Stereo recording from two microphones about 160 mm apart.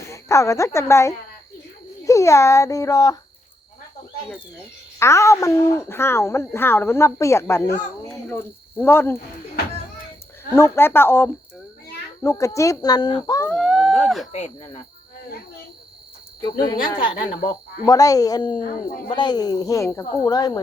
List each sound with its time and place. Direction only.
0.1 s a woman's voice: 20° left (ahead or behind)
4.9 s speech: 15° left (ahead or behind)
10.5 s speech: 15° left (ahead or behind)
13.5 s a sound: centre (ahead or behind)
14.3 s speech: 45° left (ahead or behind)
16.4 s speech: 25° left (ahead or behind)